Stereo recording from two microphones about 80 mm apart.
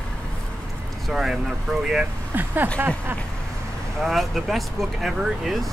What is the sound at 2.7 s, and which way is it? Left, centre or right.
Speech, right.